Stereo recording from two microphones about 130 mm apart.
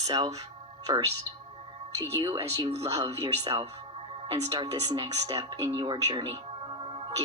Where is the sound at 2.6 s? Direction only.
50° right (ahead or behind).